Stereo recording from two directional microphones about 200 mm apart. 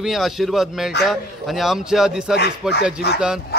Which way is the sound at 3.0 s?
55° left (ahead or behind).